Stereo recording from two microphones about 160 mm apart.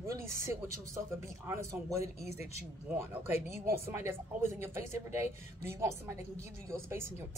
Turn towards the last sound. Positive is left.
turn(degrees=-15)  # may be behind; listen again after turning